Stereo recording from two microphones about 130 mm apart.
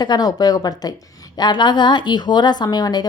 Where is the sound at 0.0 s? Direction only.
30° left (ahead or behind).